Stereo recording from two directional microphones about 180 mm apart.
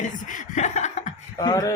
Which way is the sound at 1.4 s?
20° left (ahead or behind).